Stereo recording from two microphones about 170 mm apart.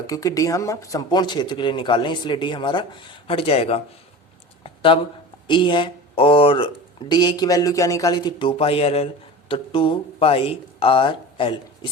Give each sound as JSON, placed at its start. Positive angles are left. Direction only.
{"t": 0.1, "sound": "speech", "side_deg": 20}
{"t": 4.6, "sound": "a sound", "side_deg": 30}
{"t": 5.5, "sound": "speech", "side_deg": 30}